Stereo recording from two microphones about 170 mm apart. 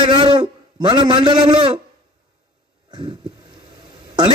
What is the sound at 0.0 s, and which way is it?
A man's voice, 25° right (ahead or behind).